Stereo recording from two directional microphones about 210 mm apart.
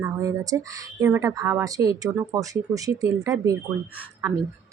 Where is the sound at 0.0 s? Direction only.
15° right (ahead or behind).